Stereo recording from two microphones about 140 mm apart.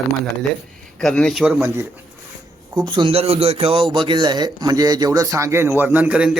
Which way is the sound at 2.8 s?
30° right (ahead or behind).